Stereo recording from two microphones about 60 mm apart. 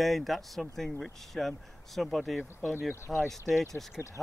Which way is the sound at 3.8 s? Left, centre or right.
Centre.